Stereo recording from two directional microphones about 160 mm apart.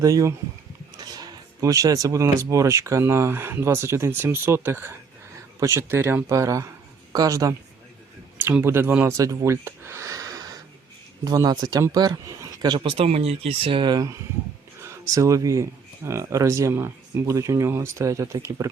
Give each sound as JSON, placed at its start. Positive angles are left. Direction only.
{"t": 0.0, "sound": "speech", "side_deg": -20}